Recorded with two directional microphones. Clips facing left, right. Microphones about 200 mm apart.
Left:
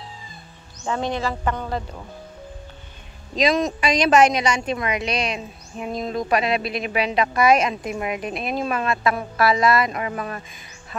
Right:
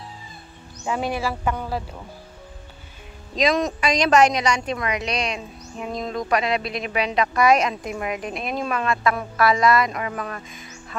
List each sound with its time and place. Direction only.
0.8 s speech: 10° right (ahead or behind)
3.3 s speech: centre (ahead or behind)
4.7 s speech: 25° left (ahead or behind)
5.0 s speech: 5° left (ahead or behind)
6.1 s speech: 25° left (ahead or behind)
7.8 s speech: 10° left (ahead or behind)
8.6 s speech: 25° left (ahead or behind)